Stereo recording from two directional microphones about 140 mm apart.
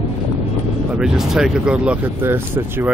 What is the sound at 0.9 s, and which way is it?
Speech, 5° right (ahead or behind).